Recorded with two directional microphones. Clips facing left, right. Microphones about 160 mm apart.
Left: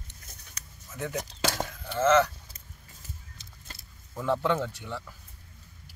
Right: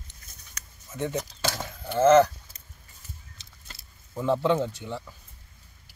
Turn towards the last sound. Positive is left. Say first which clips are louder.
# right 4 dB
turn(degrees=-20)  # may be behind; listen again after turning